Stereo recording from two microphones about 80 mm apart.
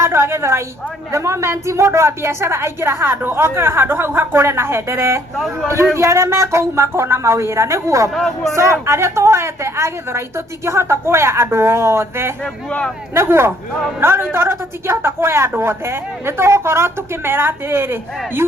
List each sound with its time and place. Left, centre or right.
0.0 s a sound: right
1.1 s a woman's voice: right
8.1 s speech: centre
8.5 s a woman's voice: right